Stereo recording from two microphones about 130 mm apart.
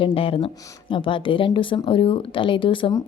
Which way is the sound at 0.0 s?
45° left (ahead or behind).